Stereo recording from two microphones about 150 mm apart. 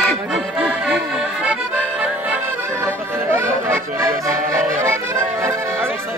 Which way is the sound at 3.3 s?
15° right (ahead or behind).